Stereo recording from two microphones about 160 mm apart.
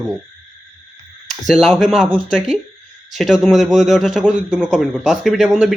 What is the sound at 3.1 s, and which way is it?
A man's voice, centre (ahead or behind).